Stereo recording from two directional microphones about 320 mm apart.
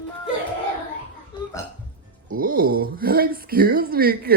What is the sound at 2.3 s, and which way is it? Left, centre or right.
Speech, right.